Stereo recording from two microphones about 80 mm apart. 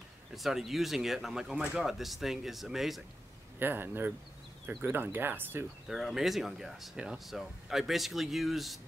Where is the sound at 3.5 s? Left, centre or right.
Right.